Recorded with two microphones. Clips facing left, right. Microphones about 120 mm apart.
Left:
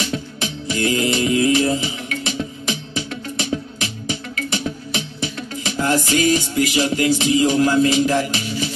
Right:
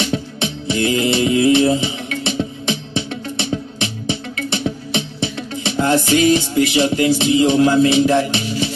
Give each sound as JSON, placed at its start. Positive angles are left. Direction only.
{"t": 0.0, "sound": "music", "side_deg": -25}